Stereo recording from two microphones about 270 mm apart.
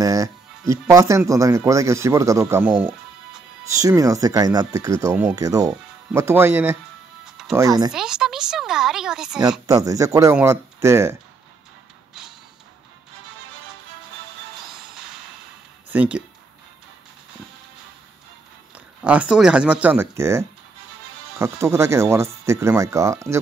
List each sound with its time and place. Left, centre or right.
0.0 s speech: centre
7.9 s speech: centre
9.7 s speech: centre
15.9 s speech: centre
19.0 s speech: centre